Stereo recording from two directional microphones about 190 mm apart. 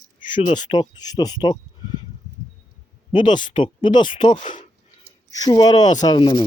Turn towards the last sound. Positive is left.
turn(degrees=25)  # may be behind; listen again after turning